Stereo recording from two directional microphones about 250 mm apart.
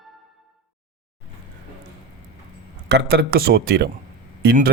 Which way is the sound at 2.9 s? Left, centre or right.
Right.